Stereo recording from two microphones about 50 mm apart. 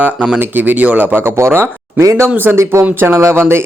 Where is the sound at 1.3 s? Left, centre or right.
Right.